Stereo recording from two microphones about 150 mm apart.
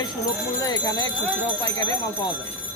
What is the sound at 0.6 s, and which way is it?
Speech, 25° left (ahead or behind).